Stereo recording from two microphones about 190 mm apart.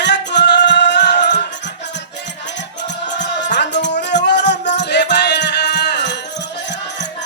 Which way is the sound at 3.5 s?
65° left (ahead or behind).